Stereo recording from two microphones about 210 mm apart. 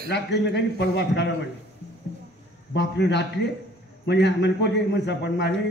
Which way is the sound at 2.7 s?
55° left (ahead or behind).